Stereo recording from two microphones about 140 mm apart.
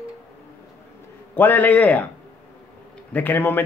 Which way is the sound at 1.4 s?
10° left (ahead or behind).